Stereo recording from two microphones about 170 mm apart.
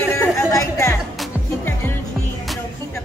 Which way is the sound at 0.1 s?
15° left (ahead or behind).